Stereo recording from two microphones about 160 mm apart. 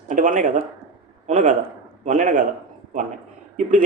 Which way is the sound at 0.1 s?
55° right (ahead or behind).